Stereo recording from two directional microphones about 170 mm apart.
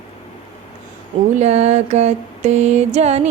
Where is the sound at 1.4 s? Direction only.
40° right (ahead or behind).